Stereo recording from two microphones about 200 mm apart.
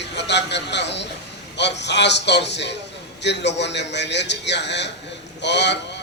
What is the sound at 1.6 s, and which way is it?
A man's voice, 60° left (ahead or behind).